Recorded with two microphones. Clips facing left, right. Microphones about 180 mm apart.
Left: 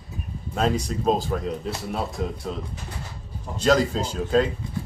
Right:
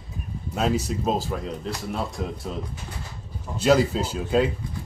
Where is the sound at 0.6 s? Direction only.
5° right (ahead or behind).